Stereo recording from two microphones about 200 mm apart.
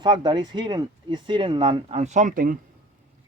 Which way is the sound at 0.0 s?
20° right (ahead or behind).